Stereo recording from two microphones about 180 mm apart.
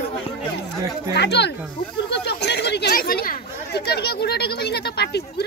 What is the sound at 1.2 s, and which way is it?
Speech, 70° left (ahead or behind).